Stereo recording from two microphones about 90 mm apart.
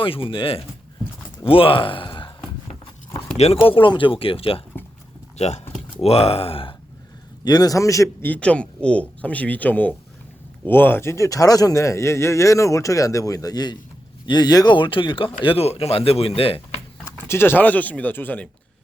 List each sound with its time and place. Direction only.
0.0 s speech: 85° left
1.5 s speech: 90° left; by 2.3 s 70° left (ahead or behind)
3.5 s speech: 85° left
6.1 s speech: 90° left
7.4 s speech: 50° left (ahead or behind)
8.2 s speech: 15° left (ahead or behind); by 14.8 s 50° left (ahead or behind)
14.8 s speech: 70° left (ahead or behind); by 16.6 s 90° left
17.2 s speech: 25° left (ahead or behind)